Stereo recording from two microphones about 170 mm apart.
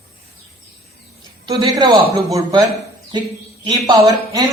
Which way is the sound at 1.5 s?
20° right (ahead or behind).